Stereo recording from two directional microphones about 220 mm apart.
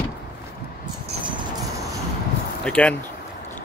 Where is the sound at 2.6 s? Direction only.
5° left (ahead or behind).